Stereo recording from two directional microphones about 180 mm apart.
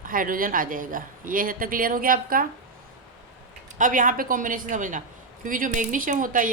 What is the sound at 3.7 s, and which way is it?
A woman's voice, 45° right (ahead or behind).